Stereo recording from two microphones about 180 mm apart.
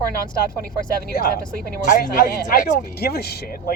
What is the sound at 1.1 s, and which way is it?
Speech, 50° left (ahead or behind).